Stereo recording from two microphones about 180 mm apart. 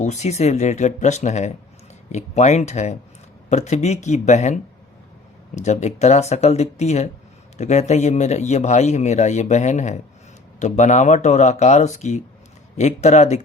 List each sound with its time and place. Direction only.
0.0 s speech: 40° left (ahead or behind)